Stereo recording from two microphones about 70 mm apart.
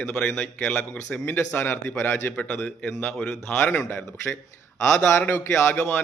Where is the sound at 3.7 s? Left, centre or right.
Left.